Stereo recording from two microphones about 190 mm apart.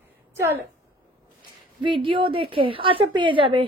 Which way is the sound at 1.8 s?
25° right (ahead or behind).